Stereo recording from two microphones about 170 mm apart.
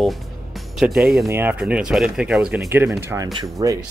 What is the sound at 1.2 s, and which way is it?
Speech, 15° right (ahead or behind).